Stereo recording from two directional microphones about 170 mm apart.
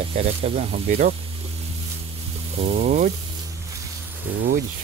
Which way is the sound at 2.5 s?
50° right (ahead or behind).